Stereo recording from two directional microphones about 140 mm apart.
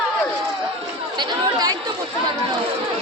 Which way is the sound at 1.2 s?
25° right (ahead or behind).